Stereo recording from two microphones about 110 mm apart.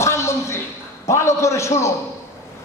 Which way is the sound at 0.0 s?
25° left (ahead or behind).